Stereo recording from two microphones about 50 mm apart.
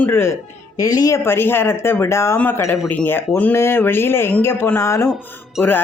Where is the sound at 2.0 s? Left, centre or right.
Left.